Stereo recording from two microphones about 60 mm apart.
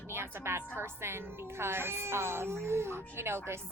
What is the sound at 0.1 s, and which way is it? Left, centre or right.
A woman's voice, right.